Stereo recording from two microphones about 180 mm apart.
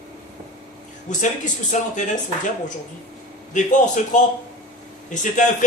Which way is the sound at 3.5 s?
45° left (ahead or behind).